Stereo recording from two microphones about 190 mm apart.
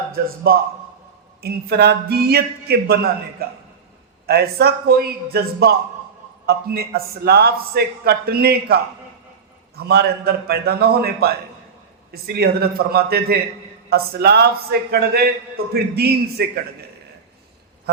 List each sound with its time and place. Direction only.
0.1 s a man's voice: 50° right (ahead or behind)
4.3 s a man's voice: 55° right (ahead or behind)